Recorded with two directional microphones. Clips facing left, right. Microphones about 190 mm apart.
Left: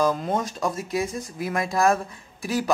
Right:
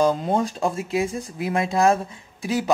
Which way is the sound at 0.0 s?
30° right (ahead or behind).